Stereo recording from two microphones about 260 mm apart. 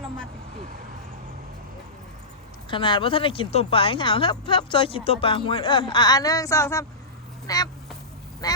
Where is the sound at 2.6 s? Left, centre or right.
Centre.